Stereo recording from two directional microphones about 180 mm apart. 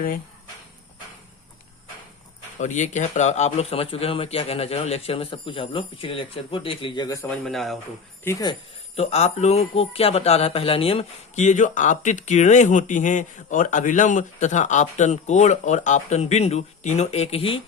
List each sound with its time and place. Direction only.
2.6 s speech: 40° left (ahead or behind); by 7.3 s 20° left (ahead or behind)
7.3 s a man's voice: centre (ahead or behind)
8.2 s speech: 15° left (ahead or behind)
9.0 s speech: 35° left (ahead or behind)